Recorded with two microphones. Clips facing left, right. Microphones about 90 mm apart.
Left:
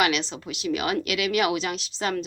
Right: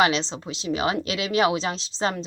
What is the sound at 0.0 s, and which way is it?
A woman's voice, 30° right (ahead or behind).